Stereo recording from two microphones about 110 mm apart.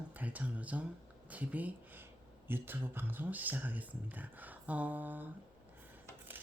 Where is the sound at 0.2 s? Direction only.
15° right (ahead or behind).